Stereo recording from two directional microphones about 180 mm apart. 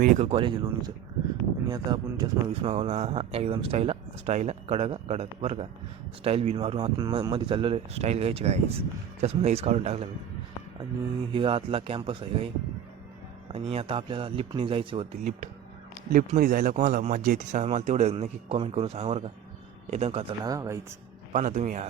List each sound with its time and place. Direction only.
0.0 s speech: 45° right (ahead or behind)
0.3 s a man's voice: 30° right (ahead or behind)
2.5 s speech: 35° right (ahead or behind)
11.3 s a man's voice: 30° right (ahead or behind)
13.5 s a man's voice: 30° right (ahead or behind)
16.1 s speech: 50° right (ahead or behind); by 20.5 s 30° right (ahead or behind)
20.5 s speech: 20° right (ahead or behind)
21.3 s speech: 40° right (ahead or behind)